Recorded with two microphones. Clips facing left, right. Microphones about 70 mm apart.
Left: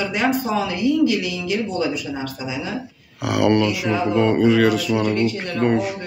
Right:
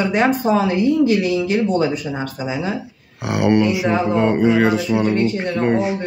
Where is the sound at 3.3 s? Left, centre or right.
Right.